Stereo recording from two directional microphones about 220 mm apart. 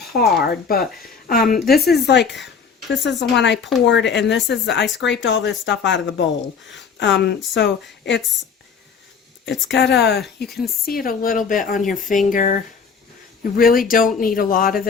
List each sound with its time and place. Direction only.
0.0 s speech: 45° left (ahead or behind)
9.6 s speech: 50° left (ahead or behind)
11.9 s speech: centre (ahead or behind)
12.2 s speech: 35° left (ahead or behind)